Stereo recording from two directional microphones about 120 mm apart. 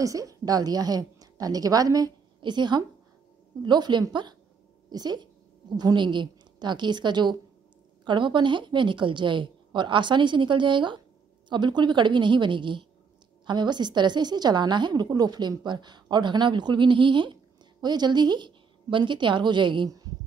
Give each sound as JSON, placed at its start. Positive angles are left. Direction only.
{"t": 0.0, "sound": "a woman's voice", "side_deg": -30}